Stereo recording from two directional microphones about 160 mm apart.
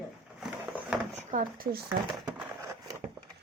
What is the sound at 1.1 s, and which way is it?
Speech, 60° right (ahead or behind).